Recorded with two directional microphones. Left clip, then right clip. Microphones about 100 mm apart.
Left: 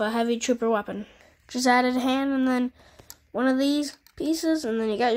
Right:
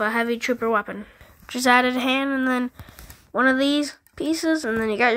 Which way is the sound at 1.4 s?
Centre (ahead or behind).